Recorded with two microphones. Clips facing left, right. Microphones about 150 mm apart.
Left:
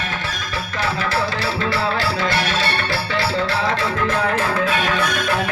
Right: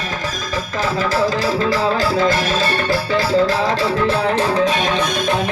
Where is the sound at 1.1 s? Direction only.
40° right (ahead or behind).